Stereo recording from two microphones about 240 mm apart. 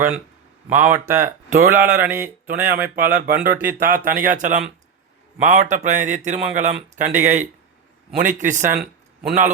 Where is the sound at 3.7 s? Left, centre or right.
Right.